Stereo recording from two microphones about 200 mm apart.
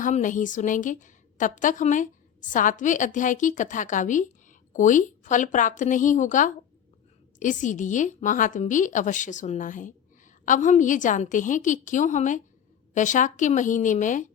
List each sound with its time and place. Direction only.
0.0 s a woman's voice: 40° left (ahead or behind)